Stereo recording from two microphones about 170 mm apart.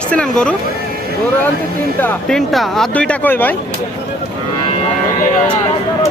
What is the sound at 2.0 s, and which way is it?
Speech, 5° left (ahead or behind).